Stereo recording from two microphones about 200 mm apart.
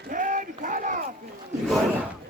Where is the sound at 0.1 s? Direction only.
40° right (ahead or behind).